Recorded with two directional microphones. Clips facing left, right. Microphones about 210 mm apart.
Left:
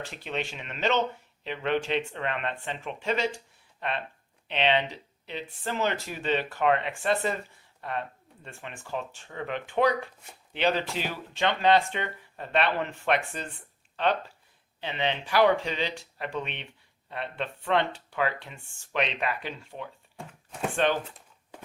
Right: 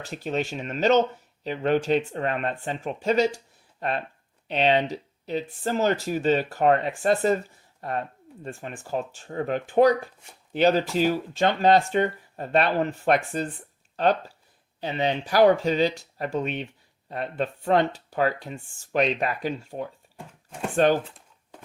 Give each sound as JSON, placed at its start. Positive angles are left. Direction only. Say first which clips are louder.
{"t": 0.1, "sound": "speech", "louder": "right 11 dB", "side_deg": -40}
{"t": 20.1, "sound": "chopping", "louder": "even", "side_deg": -5}
{"t": 20.7, "sound": "speech", "louder": "right 6 dB", "side_deg": -40}